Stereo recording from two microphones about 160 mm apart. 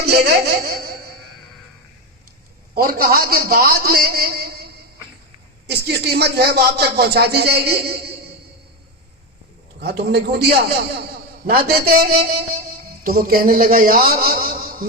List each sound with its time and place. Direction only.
0.0 s speech: 85° right; by 0.9 s 65° right (ahead or behind)
2.7 s a man's voice: 65° right (ahead or behind)
5.6 s speech: 90° right
9.8 s a man's voice: 90° right; by 14.8 s 60° right (ahead or behind)